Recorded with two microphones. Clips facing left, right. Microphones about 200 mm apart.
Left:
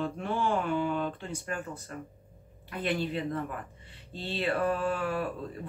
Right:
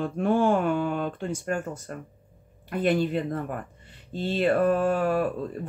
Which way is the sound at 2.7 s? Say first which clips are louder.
Right 7 dB; 45° right (ahead or behind).